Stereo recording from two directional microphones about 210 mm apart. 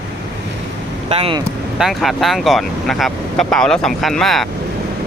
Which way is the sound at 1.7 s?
Centre (ahead or behind).